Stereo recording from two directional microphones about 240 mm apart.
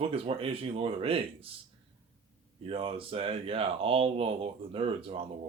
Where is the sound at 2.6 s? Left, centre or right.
Right.